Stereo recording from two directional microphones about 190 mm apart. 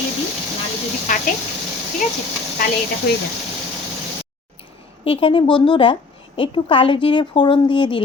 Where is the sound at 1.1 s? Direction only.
40° left (ahead or behind).